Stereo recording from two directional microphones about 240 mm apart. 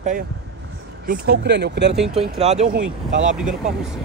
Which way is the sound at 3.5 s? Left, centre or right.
Centre.